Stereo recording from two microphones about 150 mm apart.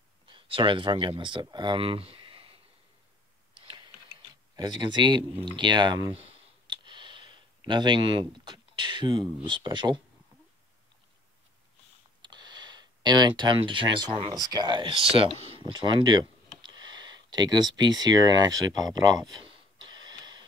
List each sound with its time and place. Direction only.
0.3 s speech: 35° right (ahead or behind)
3.5 s typing: 30° right (ahead or behind)
4.6 s speech: 30° right (ahead or behind)
6.7 s a sound: 30° right (ahead or behind)
12.2 s speech: 30° right (ahead or behind)
18.8 s a sound: 25° right (ahead or behind)